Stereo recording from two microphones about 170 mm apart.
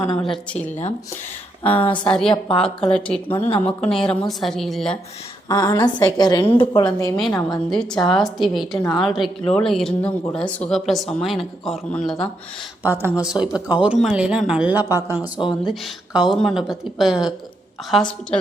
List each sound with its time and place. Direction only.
1.6 s speech: 30° left (ahead or behind)
2.0 s speech: 5° left (ahead or behind)
3.4 s speech: 40° left (ahead or behind)
3.8 s speech: 5° left (ahead or behind)
5.5 s a woman's voice: 20° left (ahead or behind)
7.2 s speech: centre (ahead or behind)
12.8 s speech: 10° right (ahead or behind)
15.6 s speech: centre (ahead or behind)